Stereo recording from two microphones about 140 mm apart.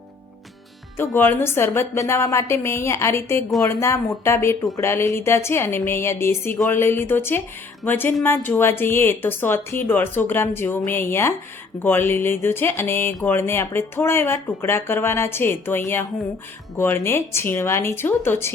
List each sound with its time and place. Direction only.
0.9 s speech: 15° left (ahead or behind)